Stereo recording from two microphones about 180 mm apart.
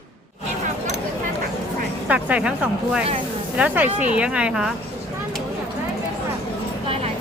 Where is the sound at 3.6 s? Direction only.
10° right (ahead or behind).